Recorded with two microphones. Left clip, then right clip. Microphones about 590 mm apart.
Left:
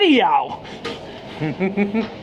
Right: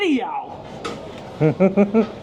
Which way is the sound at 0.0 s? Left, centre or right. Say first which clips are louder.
Left 7 dB; left.